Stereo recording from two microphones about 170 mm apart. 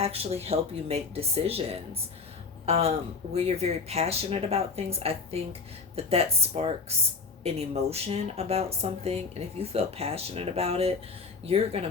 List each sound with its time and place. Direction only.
0.0 s speech: 35° right (ahead or behind)